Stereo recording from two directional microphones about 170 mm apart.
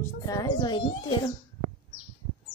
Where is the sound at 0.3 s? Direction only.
25° left (ahead or behind).